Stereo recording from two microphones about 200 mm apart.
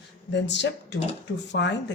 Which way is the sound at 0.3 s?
60° left (ahead or behind).